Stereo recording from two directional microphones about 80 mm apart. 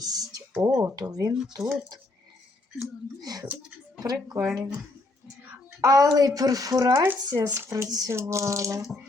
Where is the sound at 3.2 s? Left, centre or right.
Right.